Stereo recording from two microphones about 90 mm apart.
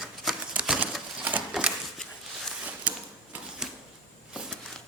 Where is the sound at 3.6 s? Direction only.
5° right (ahead or behind).